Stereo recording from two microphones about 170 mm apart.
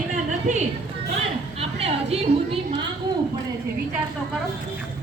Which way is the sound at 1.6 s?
35° right (ahead or behind).